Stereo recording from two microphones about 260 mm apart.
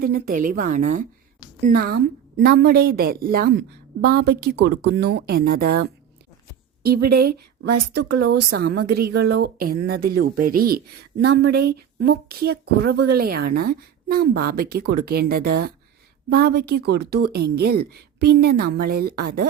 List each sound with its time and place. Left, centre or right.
0.0 s a woman's voice: right
7.1 s a woman's voice: right